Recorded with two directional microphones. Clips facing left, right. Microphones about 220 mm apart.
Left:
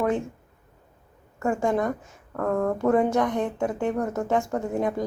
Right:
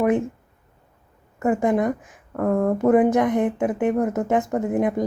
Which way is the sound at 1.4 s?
20° right (ahead or behind).